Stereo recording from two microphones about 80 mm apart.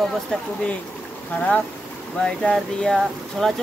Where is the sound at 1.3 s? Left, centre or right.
Centre.